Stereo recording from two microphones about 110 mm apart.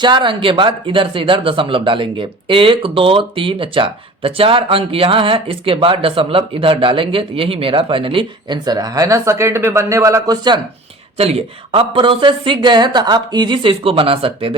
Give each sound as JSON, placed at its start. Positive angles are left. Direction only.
{"t": 0.0, "sound": "speech", "side_deg": -45}
{"t": 11.2, "sound": "speech", "side_deg": -65}